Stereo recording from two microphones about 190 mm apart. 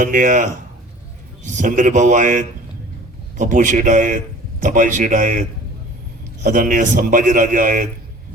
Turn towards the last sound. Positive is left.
turn(degrees=-45)  # may be behind; listen again after turning